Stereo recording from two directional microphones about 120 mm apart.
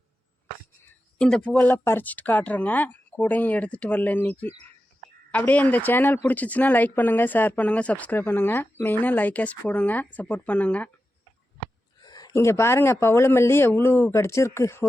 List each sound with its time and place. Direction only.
1.2 s speech: 5° left (ahead or behind)
12.0 s speech: 35° left (ahead or behind)